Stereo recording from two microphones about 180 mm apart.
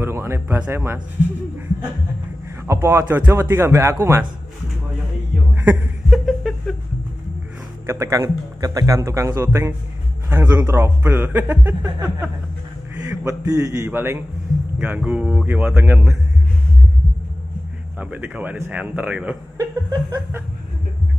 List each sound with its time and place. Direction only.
0.0 s speech: 15° right (ahead or behind)
2.6 s speech: 15° right (ahead or behind)
5.5 s a sound: 5° right (ahead or behind)
7.8 s a man's voice: 15° right (ahead or behind)
17.9 s speech: 10° right (ahead or behind)
19.5 s chuckle: 20° right (ahead or behind)